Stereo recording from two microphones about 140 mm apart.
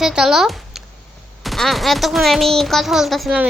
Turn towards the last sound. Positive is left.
turn(degrees=0)  # may be behind; listen again after turning